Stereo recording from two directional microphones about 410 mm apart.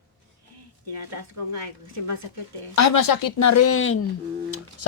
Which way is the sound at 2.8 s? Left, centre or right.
Left.